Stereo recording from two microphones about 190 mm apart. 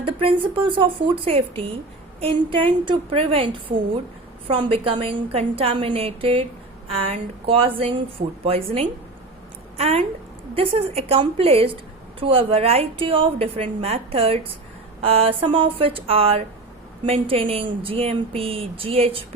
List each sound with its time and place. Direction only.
0.0 s a woman's voice: 30° right (ahead or behind)